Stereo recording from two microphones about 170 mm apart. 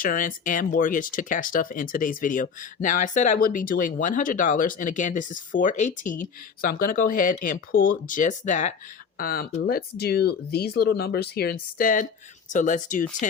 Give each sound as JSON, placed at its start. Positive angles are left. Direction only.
{"t": 0.0, "sound": "speech", "side_deg": 55}
{"t": 9.1, "sound": "speech", "side_deg": 60}
{"t": 11.8, "sound": "speech", "side_deg": 50}